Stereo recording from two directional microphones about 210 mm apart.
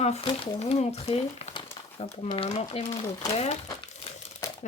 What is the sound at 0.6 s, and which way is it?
A woman's voice, 30° left (ahead or behind).